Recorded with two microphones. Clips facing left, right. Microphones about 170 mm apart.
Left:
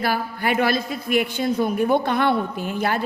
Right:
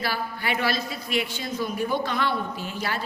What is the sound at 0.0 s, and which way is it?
A man's voice, 50° left (ahead or behind).